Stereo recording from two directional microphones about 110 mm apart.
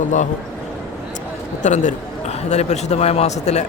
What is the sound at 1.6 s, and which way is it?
A man's voice, 90° left.